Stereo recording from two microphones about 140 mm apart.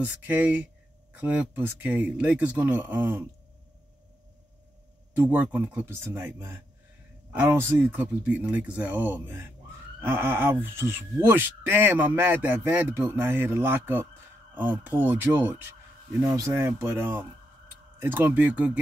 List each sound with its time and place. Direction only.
0.0 s speech: 10° right (ahead or behind)
5.1 s speech: 15° right (ahead or behind)